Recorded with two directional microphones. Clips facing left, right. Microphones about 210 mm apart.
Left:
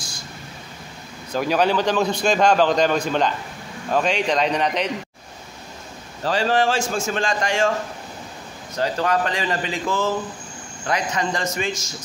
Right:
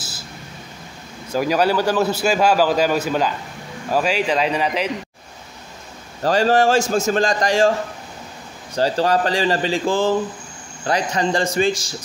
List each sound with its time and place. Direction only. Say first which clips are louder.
1.3 s a man's voice: right 2 dB; 5° right (ahead or behind)
6.2 s a man's voice: right 4 dB; 45° right (ahead or behind)
8.7 s a man's voice: right 4 dB; 30° right (ahead or behind)